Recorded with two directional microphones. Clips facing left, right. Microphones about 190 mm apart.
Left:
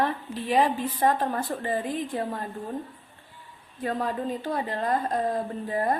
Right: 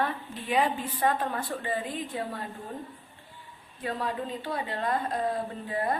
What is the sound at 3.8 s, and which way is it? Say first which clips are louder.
A woman's voice: left 4 dB; 45° left (ahead or behind).